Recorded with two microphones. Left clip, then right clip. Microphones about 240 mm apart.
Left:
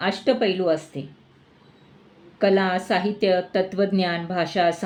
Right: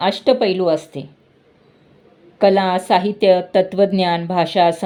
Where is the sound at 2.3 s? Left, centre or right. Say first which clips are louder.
Right 6 dB; right.